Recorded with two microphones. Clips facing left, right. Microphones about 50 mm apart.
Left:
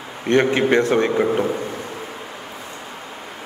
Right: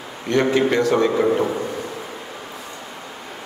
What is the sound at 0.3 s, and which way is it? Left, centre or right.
Speech, left.